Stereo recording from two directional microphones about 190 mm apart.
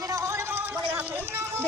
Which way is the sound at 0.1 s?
15° right (ahead or behind).